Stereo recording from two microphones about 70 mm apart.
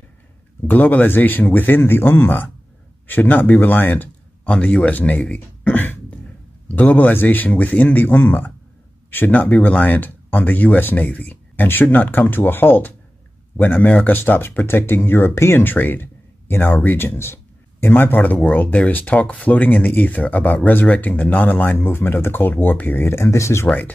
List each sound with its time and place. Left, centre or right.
0.7 s speech: left